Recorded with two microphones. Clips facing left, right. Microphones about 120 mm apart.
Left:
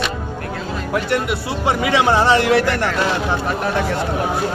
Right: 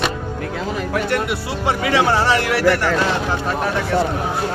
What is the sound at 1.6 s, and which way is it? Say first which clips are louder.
Speech: left 1 dB; 20° left (ahead or behind).